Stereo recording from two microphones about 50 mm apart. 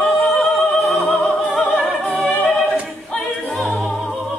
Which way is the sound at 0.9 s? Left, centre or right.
Left.